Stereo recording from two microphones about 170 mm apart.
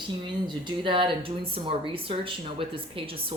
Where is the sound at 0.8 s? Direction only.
30° right (ahead or behind).